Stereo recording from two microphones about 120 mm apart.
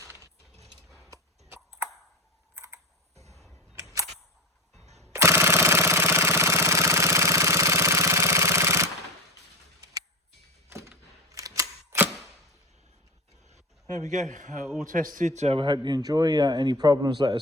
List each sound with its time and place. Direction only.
0.0 s a sound: 25° right (ahead or behind)
0.6 s a sound: centre (ahead or behind)
2.6 s computer keyboard: 25° right (ahead or behind)
5.0 s jackhammer: 20° right (ahead or behind)
10.7 s camera: 25° right (ahead or behind)
14.0 s a man's voice: 80° right
15.5 s speech: 40° right (ahead or behind)